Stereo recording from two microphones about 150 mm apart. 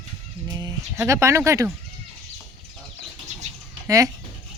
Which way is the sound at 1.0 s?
20° right (ahead or behind).